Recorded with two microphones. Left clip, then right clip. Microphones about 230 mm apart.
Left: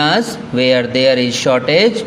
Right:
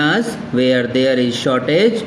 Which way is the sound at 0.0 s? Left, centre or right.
Left.